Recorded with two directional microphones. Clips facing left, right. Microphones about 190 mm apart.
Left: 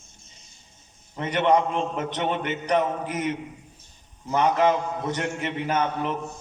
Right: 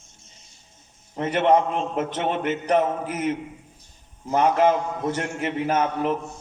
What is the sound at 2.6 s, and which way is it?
Speech, 5° right (ahead or behind).